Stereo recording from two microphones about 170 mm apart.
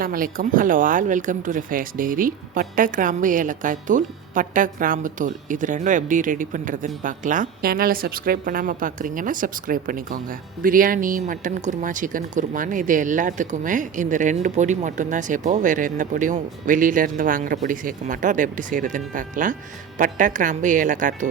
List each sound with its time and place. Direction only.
0.0 s speech: 55° right (ahead or behind)